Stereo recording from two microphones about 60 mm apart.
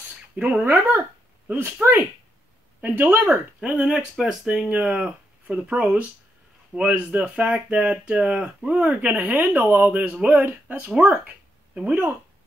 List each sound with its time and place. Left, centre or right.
0.4 s speech: right
3.6 s speech: centre
4.5 s speech: centre
11.0 s a sound: right